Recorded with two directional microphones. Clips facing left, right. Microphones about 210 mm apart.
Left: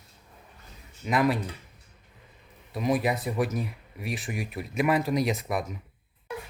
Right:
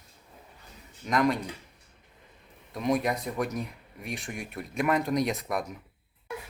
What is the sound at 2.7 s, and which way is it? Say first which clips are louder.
Speech: left 1 dB; 5° left (ahead or behind).